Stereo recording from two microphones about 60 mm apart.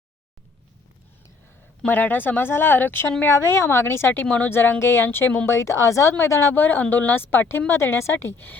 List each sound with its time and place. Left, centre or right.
1.9 s a woman's voice: left
5.5 s a woman's voice: left
6.5 s a woman's voice: left